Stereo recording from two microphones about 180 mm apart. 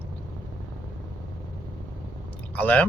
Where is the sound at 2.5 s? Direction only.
10° left (ahead or behind).